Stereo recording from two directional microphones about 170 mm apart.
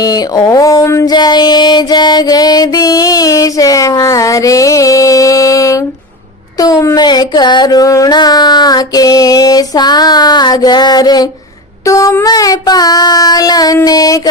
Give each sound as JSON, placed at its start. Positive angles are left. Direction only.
{"t": 0.0, "sound": "music", "side_deg": 20}
{"t": 6.6, "sound": "a sound", "side_deg": 20}
{"t": 11.9, "sound": "child singing", "side_deg": 20}